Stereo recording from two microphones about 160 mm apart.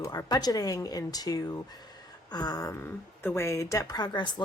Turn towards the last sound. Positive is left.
turn(degrees=30)  # may be behind; listen again after turning